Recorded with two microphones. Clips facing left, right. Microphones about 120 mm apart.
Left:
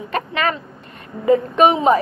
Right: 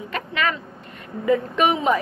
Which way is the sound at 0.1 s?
40° left (ahead or behind).